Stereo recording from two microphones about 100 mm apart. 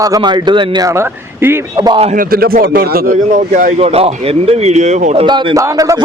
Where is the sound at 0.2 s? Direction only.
45° right (ahead or behind).